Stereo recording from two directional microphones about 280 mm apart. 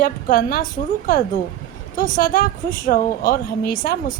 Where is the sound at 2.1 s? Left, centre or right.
Left.